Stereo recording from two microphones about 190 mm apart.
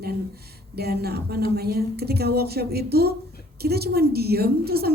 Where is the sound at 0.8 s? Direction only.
55° right (ahead or behind).